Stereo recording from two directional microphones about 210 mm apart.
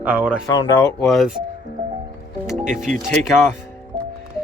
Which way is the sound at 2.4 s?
Centre (ahead or behind).